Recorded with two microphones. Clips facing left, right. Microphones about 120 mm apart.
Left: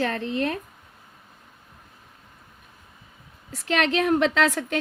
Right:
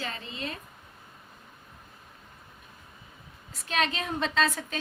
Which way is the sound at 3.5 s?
80° left.